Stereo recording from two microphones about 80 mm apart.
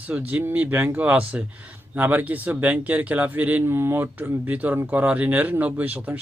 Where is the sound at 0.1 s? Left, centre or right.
Right.